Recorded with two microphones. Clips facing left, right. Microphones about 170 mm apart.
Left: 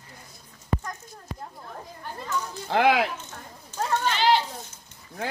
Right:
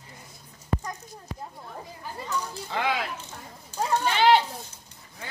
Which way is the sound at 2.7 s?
75° left (ahead or behind).